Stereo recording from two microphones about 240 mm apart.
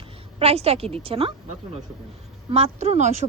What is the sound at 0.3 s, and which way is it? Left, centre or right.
Speech, right.